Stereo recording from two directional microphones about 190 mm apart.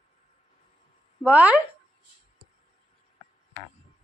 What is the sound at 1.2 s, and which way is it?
Speech, 10° right (ahead or behind).